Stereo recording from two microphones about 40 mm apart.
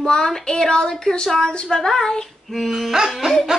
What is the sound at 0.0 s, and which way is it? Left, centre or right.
Speech, centre.